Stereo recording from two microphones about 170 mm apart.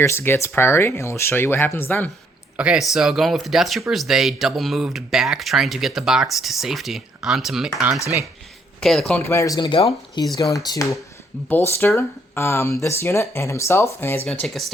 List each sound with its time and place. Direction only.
0.0 s speech: 15° left (ahead or behind)
2.6 s speech: 5° right (ahead or behind)
9.2 s speech: 15° left (ahead or behind)
14.3 s speech: centre (ahead or behind)